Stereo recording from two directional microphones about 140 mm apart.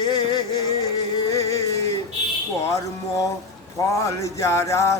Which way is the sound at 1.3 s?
25° left (ahead or behind).